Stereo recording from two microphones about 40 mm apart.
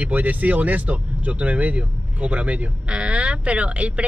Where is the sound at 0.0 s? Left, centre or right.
Right.